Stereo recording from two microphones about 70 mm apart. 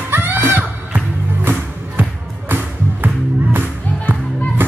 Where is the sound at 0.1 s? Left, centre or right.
Right.